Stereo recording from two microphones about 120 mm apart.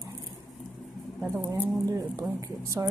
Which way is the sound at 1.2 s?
20° right (ahead or behind).